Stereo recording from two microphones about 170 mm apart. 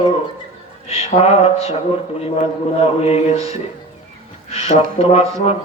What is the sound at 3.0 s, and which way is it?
A man's voice, 35° left (ahead or behind).